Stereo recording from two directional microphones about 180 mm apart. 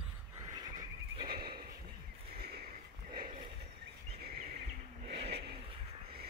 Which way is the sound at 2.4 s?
60° right (ahead or behind).